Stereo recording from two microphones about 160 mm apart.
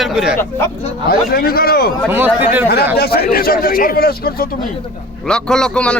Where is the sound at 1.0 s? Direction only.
70° left (ahead or behind).